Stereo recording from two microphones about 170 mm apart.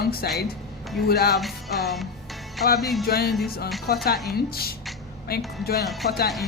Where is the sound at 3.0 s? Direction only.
65° left (ahead or behind).